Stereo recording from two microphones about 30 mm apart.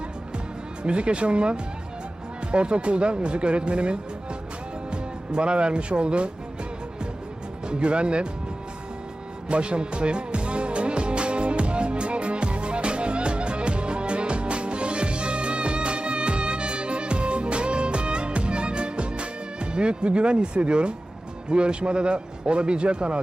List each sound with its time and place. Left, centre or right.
0.9 s speech: right
7.7 s speech: right
9.5 s music: right
21.5 s speech: right